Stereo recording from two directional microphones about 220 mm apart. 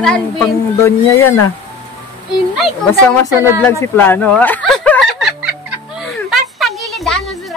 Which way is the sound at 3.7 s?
10° left (ahead or behind).